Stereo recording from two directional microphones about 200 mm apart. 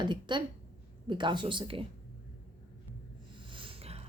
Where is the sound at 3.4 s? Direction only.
25° right (ahead or behind).